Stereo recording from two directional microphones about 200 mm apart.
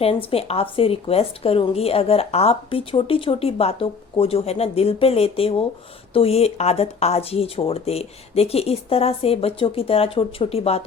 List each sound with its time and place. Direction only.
0.0 s a woman's voice: 30° left (ahead or behind)